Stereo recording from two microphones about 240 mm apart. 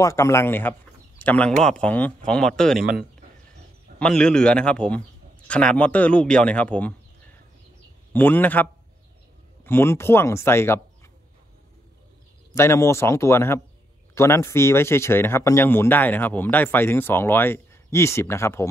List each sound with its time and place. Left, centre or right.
0.0 s speech: centre
2.8 s speech: right
4.0 s a man's voice: centre
8.1 s speech: centre
9.7 s speech: centre
12.5 s speech: centre